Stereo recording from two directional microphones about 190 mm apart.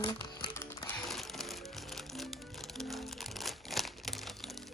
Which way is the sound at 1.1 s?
Centre (ahead or behind).